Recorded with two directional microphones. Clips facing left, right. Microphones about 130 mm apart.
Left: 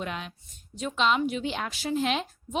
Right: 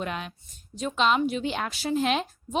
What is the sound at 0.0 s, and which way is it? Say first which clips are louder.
A woman's voice: right 2 dB; 50° right (ahead or behind).